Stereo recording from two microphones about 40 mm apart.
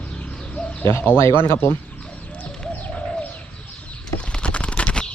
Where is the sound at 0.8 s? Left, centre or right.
Left.